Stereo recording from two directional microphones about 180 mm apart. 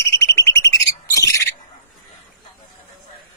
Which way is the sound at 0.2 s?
15° left (ahead or behind).